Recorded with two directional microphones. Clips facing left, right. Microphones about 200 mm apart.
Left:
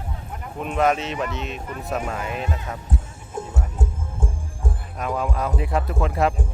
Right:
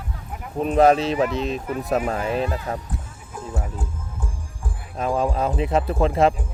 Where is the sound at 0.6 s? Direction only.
35° right (ahead or behind).